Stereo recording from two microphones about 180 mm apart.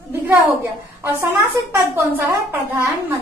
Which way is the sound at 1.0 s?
10° right (ahead or behind).